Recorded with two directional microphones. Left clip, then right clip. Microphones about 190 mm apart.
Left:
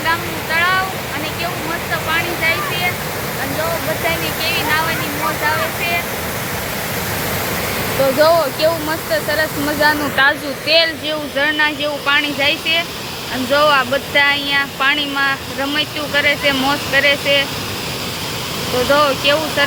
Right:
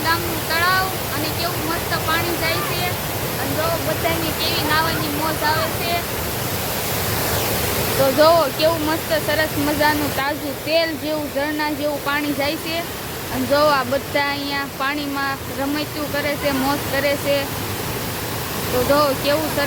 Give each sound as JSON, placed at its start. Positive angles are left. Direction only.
{"t": 0.1, "sound": "a sound", "side_deg": -5}
{"t": 4.4, "sound": "speech", "side_deg": -20}
{"t": 8.2, "sound": "speech", "side_deg": -5}
{"t": 18.9, "sound": "speech", "side_deg": -10}